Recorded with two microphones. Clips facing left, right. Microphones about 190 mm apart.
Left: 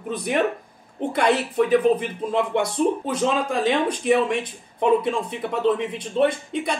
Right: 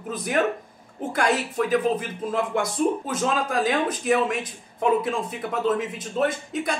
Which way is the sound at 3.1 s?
Centre (ahead or behind).